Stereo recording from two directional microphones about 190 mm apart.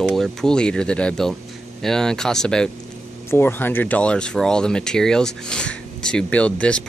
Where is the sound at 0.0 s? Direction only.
Centre (ahead or behind).